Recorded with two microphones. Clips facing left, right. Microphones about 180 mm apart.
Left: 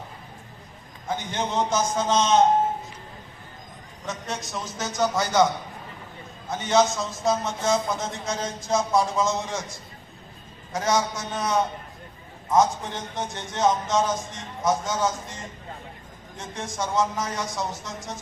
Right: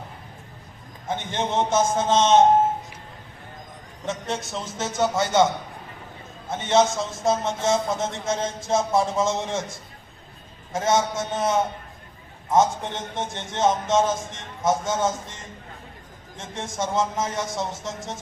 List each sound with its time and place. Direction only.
1.0 s a man's voice: 25° right (ahead or behind)
4.0 s a man's voice: 25° right (ahead or behind)
6.5 s a man's voice: 25° right (ahead or behind)
16.4 s a man's voice: 25° right (ahead or behind)